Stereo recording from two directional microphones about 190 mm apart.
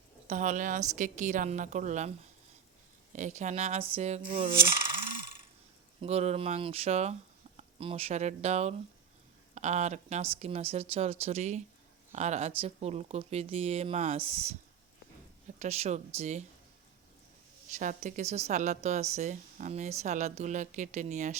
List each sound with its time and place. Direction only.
0.3 s speech: 40° right (ahead or behind)
6.0 s speech: 35° right (ahead or behind)
15.5 s speech: 35° right (ahead or behind)
17.7 s speech: 40° right (ahead or behind)